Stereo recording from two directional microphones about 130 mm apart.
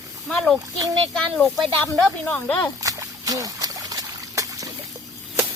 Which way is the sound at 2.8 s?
25° right (ahead or behind).